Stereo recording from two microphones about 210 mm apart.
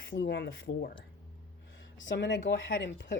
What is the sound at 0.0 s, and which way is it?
Speech, 60° left (ahead or behind).